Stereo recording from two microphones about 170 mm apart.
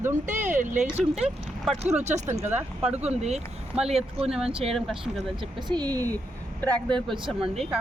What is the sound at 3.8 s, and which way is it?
Speech, 35° right (ahead or behind).